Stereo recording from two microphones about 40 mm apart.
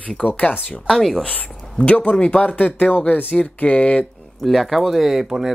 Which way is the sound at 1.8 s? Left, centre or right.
Left.